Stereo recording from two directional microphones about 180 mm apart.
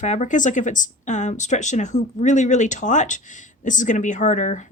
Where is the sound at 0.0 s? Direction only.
40° left (ahead or behind).